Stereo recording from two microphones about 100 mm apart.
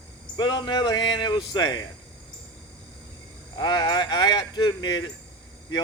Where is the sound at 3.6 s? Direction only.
45° left (ahead or behind).